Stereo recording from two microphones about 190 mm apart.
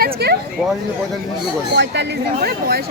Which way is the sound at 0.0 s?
60° right (ahead or behind).